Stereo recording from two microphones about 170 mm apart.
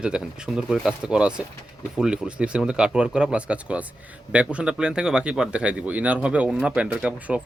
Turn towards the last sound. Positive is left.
turn(degrees=-5)  # may be behind; listen again after turning